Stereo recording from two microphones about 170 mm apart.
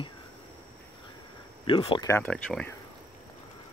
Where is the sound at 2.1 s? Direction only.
15° left (ahead or behind).